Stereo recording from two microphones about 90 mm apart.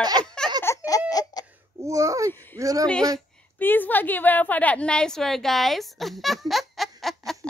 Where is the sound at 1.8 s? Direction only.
35° right (ahead or behind).